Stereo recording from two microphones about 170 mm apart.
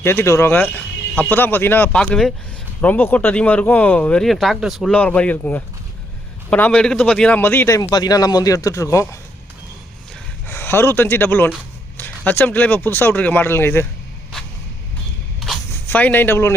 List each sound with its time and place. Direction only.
0.0 s speech: 15° left (ahead or behind)
10.4 s speech: 10° left (ahead or behind)
15.9 s speech: 10° left (ahead or behind)